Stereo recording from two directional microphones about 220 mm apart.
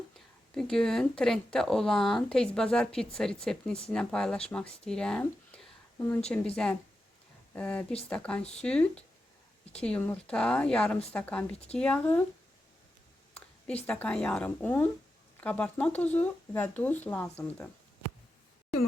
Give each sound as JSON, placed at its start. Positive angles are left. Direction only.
{"t": 0.5, "sound": "speech", "side_deg": 5}
{"t": 7.5, "sound": "speech", "side_deg": 5}
{"t": 11.5, "sound": "speech", "side_deg": 30}
{"t": 11.8, "sound": "speech", "side_deg": 5}
{"t": 13.8, "sound": "speech", "side_deg": 5}